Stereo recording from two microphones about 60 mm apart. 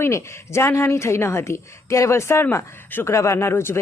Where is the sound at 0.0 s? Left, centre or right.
Left.